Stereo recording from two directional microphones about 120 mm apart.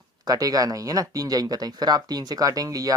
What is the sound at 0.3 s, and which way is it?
Speech, 30° right (ahead or behind).